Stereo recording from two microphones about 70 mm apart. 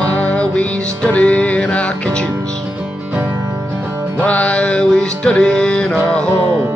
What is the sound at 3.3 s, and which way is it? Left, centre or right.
Music, right.